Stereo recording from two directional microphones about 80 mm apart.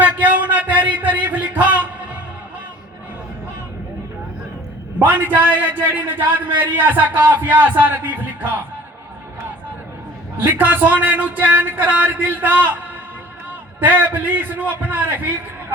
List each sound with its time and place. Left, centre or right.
0.0 s a sound: centre
4.9 s a man's voice: right
10.5 s a man's voice: right
13.7 s a man's voice: right